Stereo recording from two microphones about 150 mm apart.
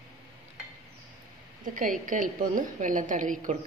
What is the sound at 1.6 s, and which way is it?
A woman's voice, 65° right (ahead or behind).